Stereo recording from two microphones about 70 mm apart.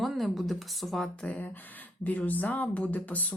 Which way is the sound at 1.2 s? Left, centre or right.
Left.